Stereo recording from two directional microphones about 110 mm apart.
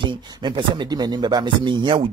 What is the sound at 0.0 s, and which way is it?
Speech, 45° right (ahead or behind).